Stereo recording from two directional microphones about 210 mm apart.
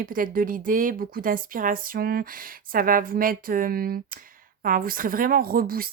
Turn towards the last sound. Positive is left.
turn(degrees=-45)  # may be behind; listen again after turning